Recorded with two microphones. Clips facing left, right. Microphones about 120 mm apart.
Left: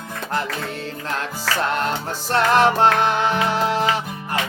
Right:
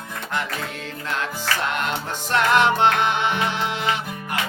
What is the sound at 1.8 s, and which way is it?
Music, 35° left (ahead or behind).